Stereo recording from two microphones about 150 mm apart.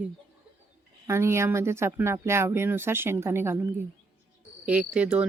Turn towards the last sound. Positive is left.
turn(degrees=-5)  # may be behind; listen again after turning